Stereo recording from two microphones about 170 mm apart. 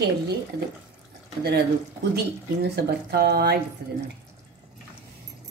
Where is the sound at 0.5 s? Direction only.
65° right (ahead or behind).